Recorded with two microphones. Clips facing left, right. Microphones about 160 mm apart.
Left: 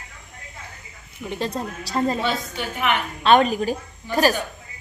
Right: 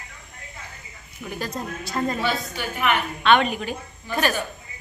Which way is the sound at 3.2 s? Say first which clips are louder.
Left 3 dB; 35° left (ahead or behind).